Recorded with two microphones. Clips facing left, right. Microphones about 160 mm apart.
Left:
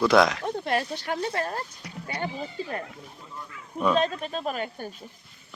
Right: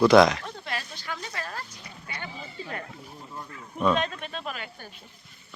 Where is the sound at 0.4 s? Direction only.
55° left (ahead or behind).